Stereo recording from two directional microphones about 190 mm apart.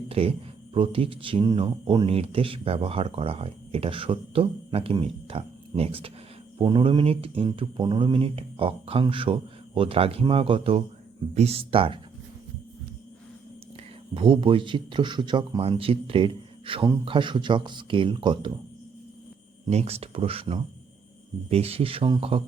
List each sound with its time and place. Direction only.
0.1 s speech: 30° right (ahead or behind)
14.1 s speech: 25° right (ahead or behind)
19.7 s speech: 35° right (ahead or behind)